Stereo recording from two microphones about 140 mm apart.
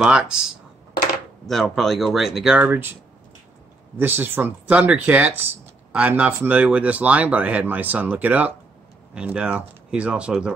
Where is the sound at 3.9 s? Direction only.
15° right (ahead or behind).